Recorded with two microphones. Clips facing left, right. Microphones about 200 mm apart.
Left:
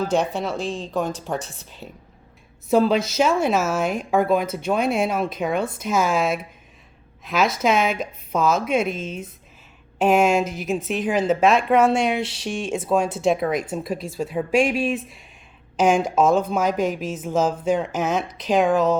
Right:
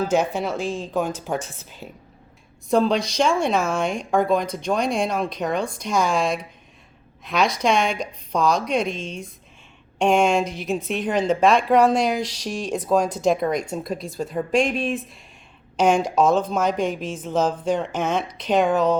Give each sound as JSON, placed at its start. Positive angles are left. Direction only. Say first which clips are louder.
{"t": 0.1, "sound": "a woman's voice", "louder": "right 1 dB", "side_deg": -5}
{"t": 1.4, "sound": "a woman's voice", "louder": "right 1 dB", "side_deg": 35}
{"t": 2.6, "sound": "a woman's voice", "louder": "left 1 dB", "side_deg": 5}
{"t": 12.2, "sound": "speech", "louder": "even", "side_deg": -40}
{"t": 12.5, "sound": "a woman's voice", "louder": "right 1 dB", "side_deg": 5}